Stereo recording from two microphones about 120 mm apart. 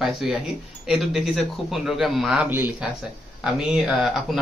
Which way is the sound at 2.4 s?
15° right (ahead or behind).